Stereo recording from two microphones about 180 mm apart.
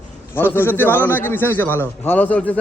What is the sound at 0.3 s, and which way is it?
A man's voice, 10° left (ahead or behind).